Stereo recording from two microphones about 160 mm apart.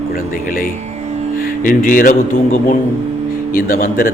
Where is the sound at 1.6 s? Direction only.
60° left (ahead or behind).